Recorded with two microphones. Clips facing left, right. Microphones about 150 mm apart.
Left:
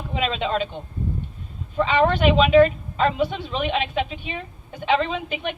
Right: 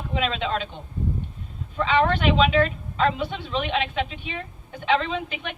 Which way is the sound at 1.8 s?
15° left (ahead or behind).